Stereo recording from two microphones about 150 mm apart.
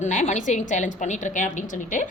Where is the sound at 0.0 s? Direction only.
50° left (ahead or behind).